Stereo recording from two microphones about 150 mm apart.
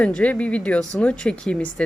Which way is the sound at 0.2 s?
10° left (ahead or behind).